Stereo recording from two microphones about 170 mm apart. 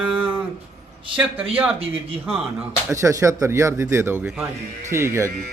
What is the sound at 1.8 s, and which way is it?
Speech, 35° right (ahead or behind).